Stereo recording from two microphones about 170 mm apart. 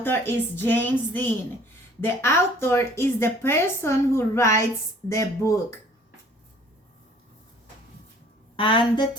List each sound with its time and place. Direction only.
0.0 s a woman's voice: 10° left (ahead or behind)
8.5 s a woman's voice: 30° left (ahead or behind)